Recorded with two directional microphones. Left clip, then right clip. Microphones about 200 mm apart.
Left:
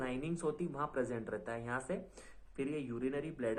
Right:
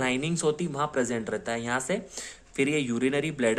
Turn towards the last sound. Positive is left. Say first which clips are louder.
# right 12 dB
turn(degrees=-35)  # may be behind; listen again after turning